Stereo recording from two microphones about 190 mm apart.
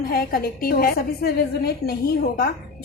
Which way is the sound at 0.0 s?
50° left (ahead or behind).